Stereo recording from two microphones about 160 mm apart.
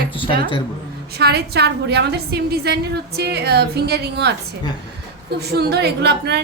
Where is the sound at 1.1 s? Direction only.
90° right.